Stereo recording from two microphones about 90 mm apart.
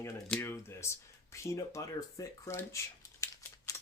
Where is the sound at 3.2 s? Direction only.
40° left (ahead or behind).